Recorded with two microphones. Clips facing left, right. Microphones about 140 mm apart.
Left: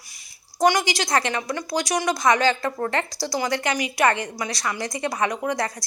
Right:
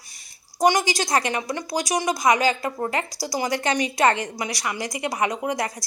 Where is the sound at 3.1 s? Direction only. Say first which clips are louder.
Left 1 dB; 40° right (ahead or behind).